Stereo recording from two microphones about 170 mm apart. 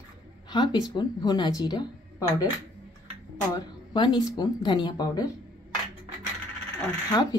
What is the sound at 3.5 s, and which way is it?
A woman's voice, 25° left (ahead or behind).